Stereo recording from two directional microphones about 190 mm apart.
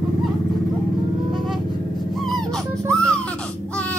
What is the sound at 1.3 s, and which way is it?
Vehicle, centre (ahead or behind).